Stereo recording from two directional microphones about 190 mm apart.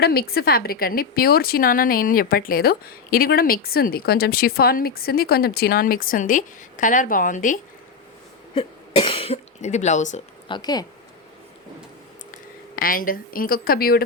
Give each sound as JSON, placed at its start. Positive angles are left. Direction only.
{"t": 0.0, "sound": "a woman's voice", "side_deg": 55}
{"t": 8.5, "sound": "speech", "side_deg": 25}
{"t": 10.5, "sound": "speech", "side_deg": 20}
{"t": 12.7, "sound": "a woman's voice", "side_deg": 50}